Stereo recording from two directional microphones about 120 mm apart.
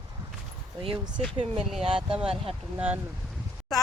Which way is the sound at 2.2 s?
55° right (ahead or behind).